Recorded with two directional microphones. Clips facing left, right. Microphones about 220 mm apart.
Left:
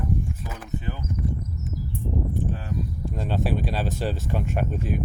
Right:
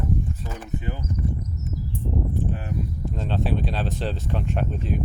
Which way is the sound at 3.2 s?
10° left (ahead or behind).